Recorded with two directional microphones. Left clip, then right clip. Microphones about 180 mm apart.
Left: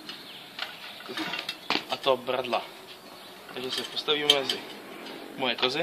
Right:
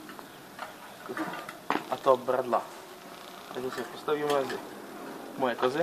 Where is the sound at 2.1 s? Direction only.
5° left (ahead or behind).